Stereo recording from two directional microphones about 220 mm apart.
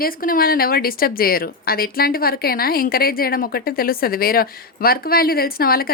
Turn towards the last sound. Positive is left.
turn(degrees=45)  # may be behind; listen again after turning